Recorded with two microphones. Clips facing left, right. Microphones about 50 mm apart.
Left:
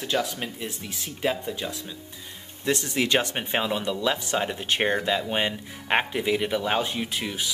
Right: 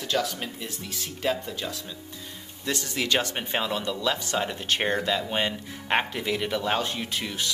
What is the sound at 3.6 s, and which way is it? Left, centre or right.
Speech, centre.